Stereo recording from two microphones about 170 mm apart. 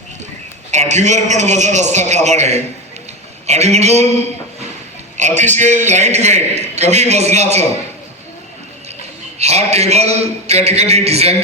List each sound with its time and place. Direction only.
0.7 s a man's voice: 45° right (ahead or behind)
5.1 s a man's voice: 45° right (ahead or behind)
9.4 s a man's voice: 40° right (ahead or behind)